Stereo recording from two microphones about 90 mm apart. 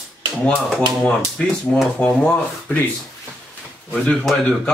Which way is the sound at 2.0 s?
15° left (ahead or behind).